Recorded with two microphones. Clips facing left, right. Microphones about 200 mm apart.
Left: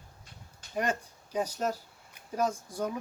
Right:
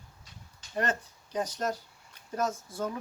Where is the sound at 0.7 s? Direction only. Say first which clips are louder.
Even; 10° left (ahead or behind).